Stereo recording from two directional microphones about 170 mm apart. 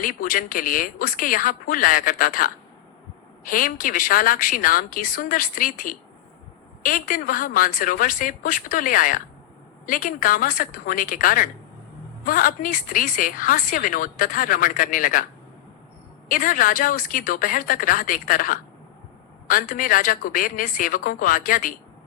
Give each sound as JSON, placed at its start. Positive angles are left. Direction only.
{"t": 0.0, "sound": "a woman's voice", "side_deg": 55}
{"t": 16.3, "sound": "a woman's voice", "side_deg": 55}